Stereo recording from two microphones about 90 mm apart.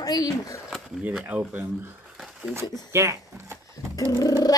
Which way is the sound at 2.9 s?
30° right (ahead or behind).